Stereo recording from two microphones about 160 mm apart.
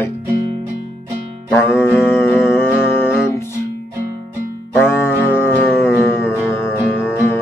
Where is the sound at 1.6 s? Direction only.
10° left (ahead or behind).